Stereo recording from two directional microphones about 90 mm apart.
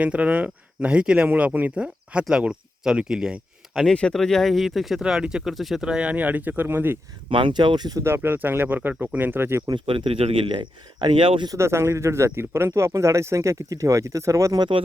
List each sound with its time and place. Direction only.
0.0 s speech: 15° right (ahead or behind)
3.8 s speech: 10° left (ahead or behind); by 7.0 s 20° right (ahead or behind)
7.3 s speech: 65° right (ahead or behind); by 8.0 s 50° right (ahead or behind)
8.0 s speech: 25° right (ahead or behind)
9.7 s speech: 80° right
11.5 s speech: 30° right (ahead or behind)
14.6 s speech: 70° right (ahead or behind)